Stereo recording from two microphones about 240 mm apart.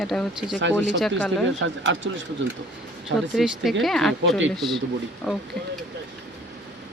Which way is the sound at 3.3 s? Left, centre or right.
Centre.